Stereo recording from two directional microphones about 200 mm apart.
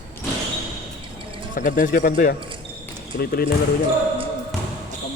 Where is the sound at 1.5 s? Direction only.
40° left (ahead or behind).